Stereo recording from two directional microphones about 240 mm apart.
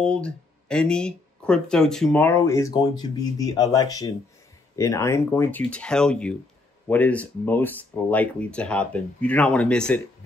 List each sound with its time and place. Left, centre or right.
0.0 s speech: centre